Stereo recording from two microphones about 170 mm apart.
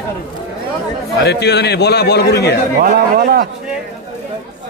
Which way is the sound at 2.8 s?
65° right (ahead or behind).